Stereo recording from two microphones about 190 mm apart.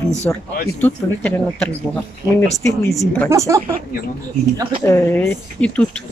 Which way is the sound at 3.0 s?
10° left (ahead or behind).